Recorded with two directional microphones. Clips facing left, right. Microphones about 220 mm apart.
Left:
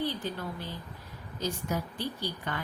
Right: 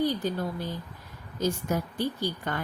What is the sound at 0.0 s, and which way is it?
Speech, 45° right (ahead or behind).